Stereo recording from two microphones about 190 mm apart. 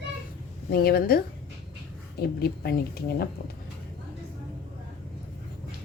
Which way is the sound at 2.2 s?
55° left (ahead or behind).